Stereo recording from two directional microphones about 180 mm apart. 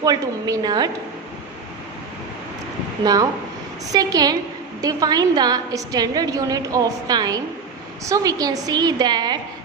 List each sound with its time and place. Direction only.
0.0 s a woman's voice: 20° right (ahead or behind)
3.0 s a woman's voice: 20° right (ahead or behind)